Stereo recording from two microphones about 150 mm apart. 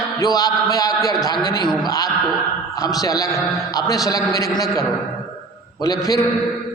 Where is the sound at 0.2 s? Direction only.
25° left (ahead or behind).